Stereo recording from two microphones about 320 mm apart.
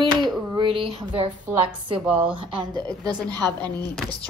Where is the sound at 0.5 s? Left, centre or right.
Centre.